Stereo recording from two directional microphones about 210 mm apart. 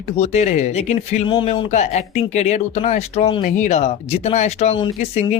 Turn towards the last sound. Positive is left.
turn(degrees=30)  # may be behind; listen again after turning